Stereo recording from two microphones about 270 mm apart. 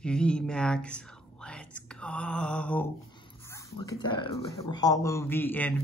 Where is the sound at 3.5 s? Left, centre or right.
Centre.